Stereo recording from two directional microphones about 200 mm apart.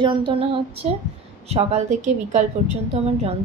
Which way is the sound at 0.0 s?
25° right (ahead or behind).